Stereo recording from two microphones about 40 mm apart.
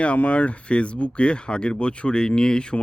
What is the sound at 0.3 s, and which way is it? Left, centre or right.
Speech, left.